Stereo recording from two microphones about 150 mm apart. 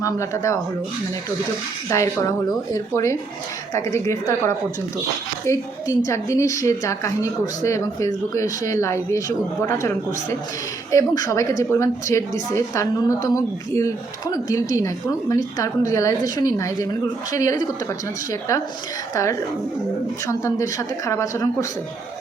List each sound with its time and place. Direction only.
0.0 s a woman's voice: 20° left (ahead or behind)
1.9 s a woman's voice: 20° left (ahead or behind)
10.9 s a woman's voice: 25° left (ahead or behind)